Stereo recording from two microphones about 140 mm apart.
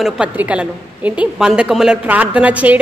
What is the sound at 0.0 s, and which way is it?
A woman's voice, 10° right (ahead or behind).